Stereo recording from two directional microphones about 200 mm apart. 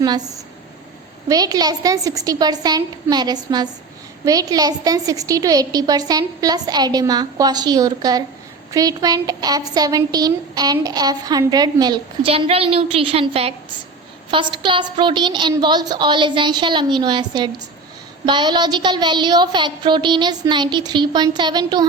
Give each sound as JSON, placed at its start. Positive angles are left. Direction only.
{"t": 0.0, "sound": "speech", "side_deg": -20}
{"t": 1.3, "sound": "a woman's voice", "side_deg": -20}